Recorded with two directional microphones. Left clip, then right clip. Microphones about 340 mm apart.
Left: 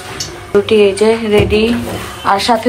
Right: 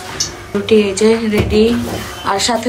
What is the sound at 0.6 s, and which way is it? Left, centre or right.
A woman's voice, centre.